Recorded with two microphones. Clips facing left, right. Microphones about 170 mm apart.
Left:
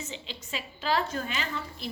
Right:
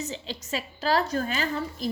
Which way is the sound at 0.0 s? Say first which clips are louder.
Right 6 dB; 40° right (ahead or behind).